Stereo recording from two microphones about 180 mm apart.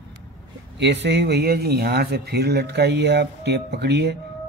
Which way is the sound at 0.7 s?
70° right (ahead or behind).